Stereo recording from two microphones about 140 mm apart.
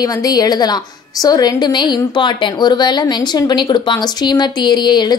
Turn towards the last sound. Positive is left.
turn(degrees=30)  # may be behind; listen again after turning